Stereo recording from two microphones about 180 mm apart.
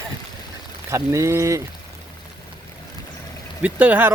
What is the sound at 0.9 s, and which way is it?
Speech, 15° right (ahead or behind).